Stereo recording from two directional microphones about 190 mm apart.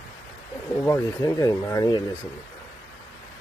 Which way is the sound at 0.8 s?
15° left (ahead or behind).